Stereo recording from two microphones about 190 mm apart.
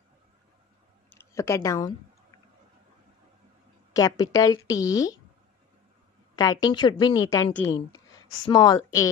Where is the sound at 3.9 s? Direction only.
20° left (ahead or behind).